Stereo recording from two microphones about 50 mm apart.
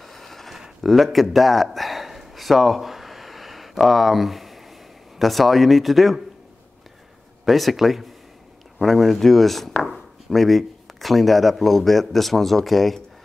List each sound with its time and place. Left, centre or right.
0.0 s a sound: centre
3.7 s speech: centre
7.4 s speech: centre